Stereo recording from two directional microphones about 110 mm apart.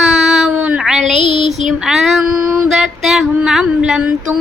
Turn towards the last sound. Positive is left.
turn(degrees=-10)  # may be behind; listen again after turning